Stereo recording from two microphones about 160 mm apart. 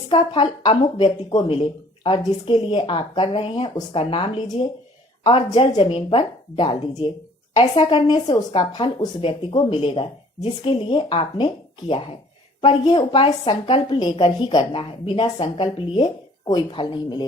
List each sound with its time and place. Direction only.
0.1 s a woman's voice: 30° left (ahead or behind)